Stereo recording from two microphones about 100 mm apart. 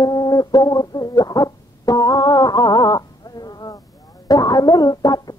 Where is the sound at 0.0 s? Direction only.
40° left (ahead or behind).